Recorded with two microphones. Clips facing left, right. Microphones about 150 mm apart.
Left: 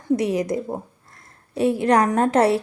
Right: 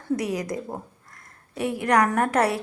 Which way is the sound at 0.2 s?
25° left (ahead or behind).